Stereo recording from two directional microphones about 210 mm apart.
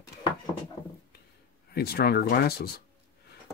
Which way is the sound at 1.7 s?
50° left (ahead or behind).